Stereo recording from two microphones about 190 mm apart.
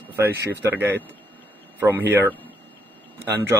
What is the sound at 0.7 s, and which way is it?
Speech, 10° right (ahead or behind).